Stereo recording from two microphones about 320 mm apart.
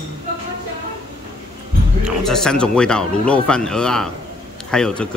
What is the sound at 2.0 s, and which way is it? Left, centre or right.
Speech, centre.